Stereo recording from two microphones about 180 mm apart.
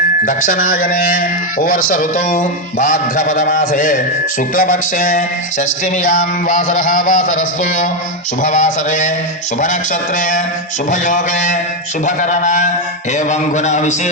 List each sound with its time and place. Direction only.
0.3 s a man's voice: 50° left (ahead or behind)